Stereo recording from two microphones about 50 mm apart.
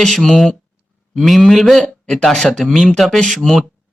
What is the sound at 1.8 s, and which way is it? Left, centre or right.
Speech, centre.